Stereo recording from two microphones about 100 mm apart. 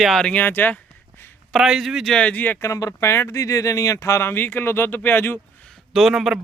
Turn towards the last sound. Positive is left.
turn(degrees=0)  # may be behind; listen again after turning